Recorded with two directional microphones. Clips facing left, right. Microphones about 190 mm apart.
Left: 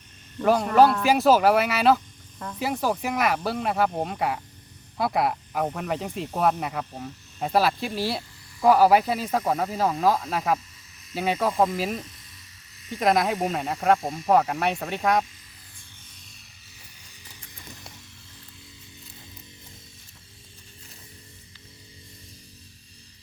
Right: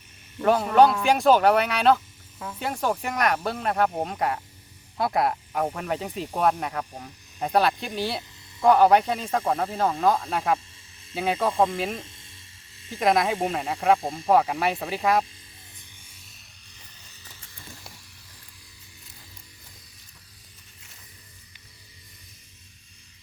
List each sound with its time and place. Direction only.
0.3 s speech: 5° right (ahead or behind)
11.9 s electric toothbrush: 25° right (ahead or behind)
13.0 s speech: centre (ahead or behind)
14.0 s speech: 30° right (ahead or behind)
14.3 s speech: centre (ahead or behind)
16.0 s music: 5° right (ahead or behind)